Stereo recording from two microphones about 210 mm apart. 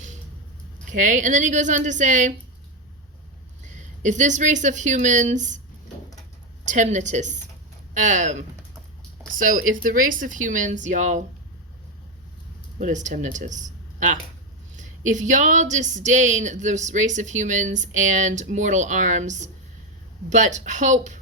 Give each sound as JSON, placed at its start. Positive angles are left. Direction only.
{"t": 0.9, "sound": "speech", "side_deg": -35}
{"t": 3.7, "sound": "speech", "side_deg": -35}
{"t": 6.7, "sound": "speech", "side_deg": -35}
{"t": 12.8, "sound": "speech", "side_deg": -35}